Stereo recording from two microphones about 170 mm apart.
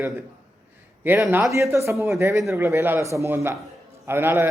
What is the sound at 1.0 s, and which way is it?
A man's voice, 10° right (ahead or behind).